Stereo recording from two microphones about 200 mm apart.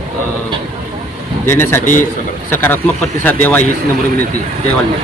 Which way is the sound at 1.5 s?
10° left (ahead or behind).